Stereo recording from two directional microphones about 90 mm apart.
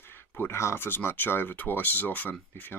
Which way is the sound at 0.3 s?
30° left (ahead or behind).